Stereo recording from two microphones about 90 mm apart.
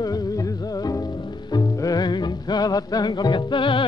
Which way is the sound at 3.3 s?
65° left (ahead or behind).